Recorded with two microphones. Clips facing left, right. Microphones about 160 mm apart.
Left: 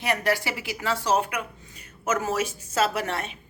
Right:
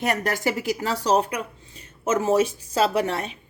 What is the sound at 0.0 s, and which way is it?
A woman's voice, 45° right (ahead or behind).